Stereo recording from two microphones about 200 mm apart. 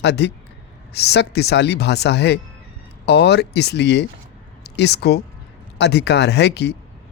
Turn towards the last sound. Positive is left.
turn(degrees=55)  # may be behind; listen again after turning